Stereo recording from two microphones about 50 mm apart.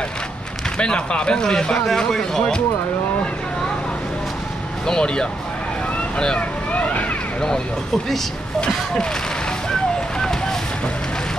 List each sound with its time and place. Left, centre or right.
0.7 s speech: left
4.8 s speech: centre
5.9 s vehicle: centre
9.7 s fire: centre